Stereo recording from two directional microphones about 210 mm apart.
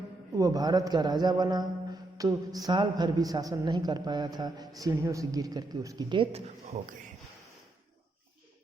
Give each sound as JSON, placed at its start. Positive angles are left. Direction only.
{"t": 0.3, "sound": "a man's voice", "side_deg": -15}